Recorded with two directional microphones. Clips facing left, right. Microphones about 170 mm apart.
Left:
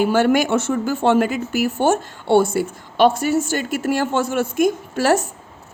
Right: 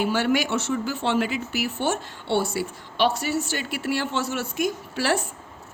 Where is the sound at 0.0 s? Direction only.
50° left (ahead or behind).